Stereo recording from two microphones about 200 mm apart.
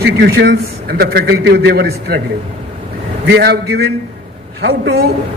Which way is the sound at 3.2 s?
55° right (ahead or behind).